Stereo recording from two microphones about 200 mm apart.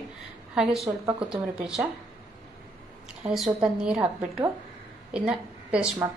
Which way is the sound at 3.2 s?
Centre (ahead or behind).